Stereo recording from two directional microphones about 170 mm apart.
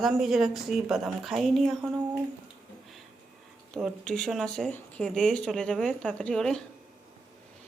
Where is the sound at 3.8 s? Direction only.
Centre (ahead or behind).